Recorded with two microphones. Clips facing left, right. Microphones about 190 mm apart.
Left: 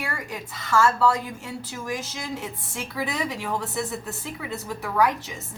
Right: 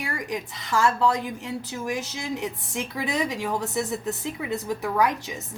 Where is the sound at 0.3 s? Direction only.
20° right (ahead or behind).